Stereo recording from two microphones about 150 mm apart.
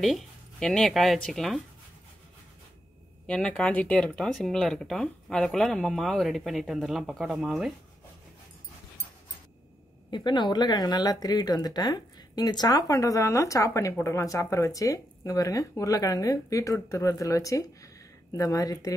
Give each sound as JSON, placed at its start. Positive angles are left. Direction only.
{"t": 0.0, "sound": "speech", "side_deg": 0}
{"t": 3.3, "sound": "speech", "side_deg": 10}
{"t": 10.1, "sound": "speech", "side_deg": 30}